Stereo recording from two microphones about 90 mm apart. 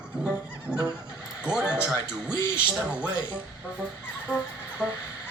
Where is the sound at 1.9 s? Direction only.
10° right (ahead or behind).